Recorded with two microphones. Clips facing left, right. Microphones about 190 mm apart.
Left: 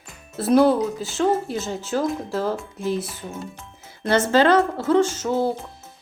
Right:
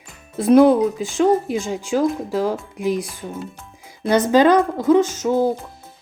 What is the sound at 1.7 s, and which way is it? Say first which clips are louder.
Speech: right 4 dB; 10° right (ahead or behind).